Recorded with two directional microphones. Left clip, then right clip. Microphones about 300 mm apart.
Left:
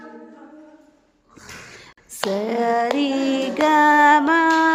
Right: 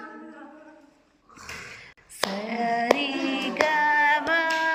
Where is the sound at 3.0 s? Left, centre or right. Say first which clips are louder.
Left 6 dB; centre.